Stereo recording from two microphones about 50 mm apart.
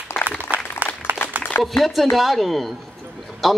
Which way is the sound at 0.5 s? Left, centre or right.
Right.